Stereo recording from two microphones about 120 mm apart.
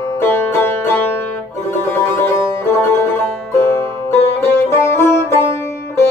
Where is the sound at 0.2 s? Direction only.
20° left (ahead or behind).